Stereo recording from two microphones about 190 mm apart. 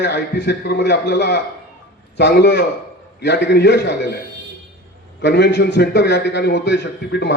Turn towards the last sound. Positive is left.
turn(degrees=60)  # may be behind; listen again after turning